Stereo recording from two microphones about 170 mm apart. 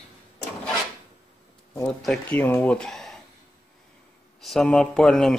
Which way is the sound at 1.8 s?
5° left (ahead or behind).